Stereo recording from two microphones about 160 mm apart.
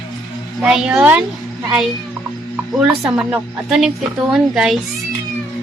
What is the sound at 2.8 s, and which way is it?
Speech, 5° right (ahead or behind).